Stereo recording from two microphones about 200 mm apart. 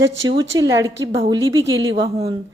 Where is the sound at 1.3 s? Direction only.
70° right (ahead or behind).